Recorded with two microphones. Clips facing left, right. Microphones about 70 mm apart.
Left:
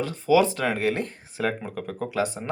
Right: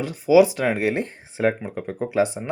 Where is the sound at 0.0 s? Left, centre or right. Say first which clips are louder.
Right 5 dB; centre.